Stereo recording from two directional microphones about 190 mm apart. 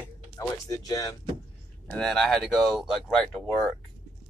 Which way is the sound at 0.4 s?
20° left (ahead or behind).